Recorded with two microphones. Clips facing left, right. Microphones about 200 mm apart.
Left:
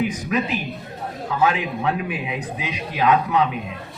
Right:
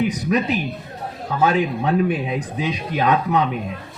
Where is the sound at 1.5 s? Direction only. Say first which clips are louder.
Right 6 dB; 35° right (ahead or behind).